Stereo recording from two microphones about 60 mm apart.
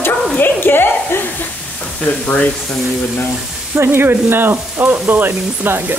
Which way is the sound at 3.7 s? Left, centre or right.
Right.